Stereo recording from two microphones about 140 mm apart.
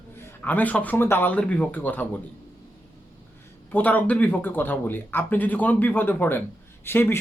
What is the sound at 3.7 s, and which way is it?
Speech, 10° left (ahead or behind).